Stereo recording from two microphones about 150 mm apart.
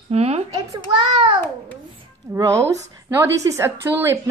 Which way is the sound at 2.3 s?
20° right (ahead or behind).